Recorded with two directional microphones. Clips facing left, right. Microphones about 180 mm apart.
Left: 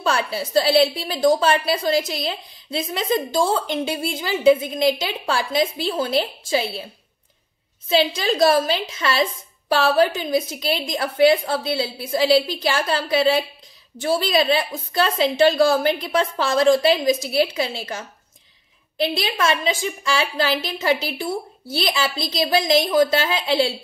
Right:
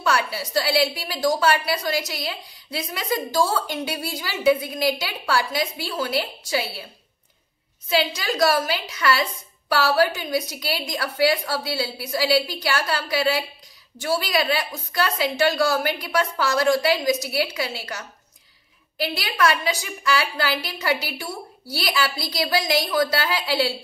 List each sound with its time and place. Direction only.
0.0 s a woman's voice: 30° left (ahead or behind)
7.9 s a woman's voice: 25° left (ahead or behind)